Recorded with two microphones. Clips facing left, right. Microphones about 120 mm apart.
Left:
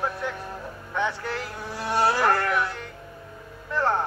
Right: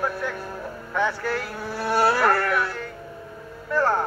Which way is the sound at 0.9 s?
20° left (ahead or behind).